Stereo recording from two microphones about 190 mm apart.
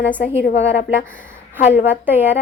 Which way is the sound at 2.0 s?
10° right (ahead or behind).